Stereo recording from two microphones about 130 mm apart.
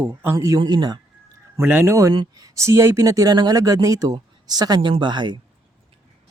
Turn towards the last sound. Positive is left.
turn(degrees=-35)  # may be behind; listen again after turning